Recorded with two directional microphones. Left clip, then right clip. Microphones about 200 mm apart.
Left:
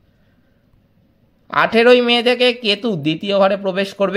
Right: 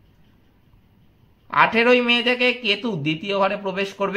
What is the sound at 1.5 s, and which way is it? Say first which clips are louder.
A man's voice: left 4 dB; 35° left (ahead or behind).